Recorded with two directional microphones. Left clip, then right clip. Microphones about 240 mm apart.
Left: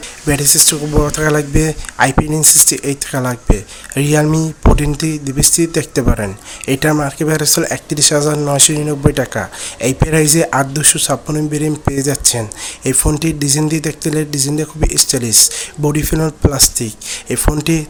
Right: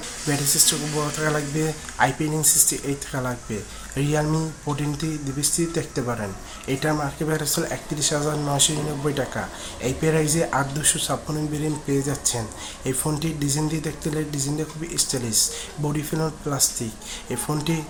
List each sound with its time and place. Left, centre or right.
0.3 s speech: left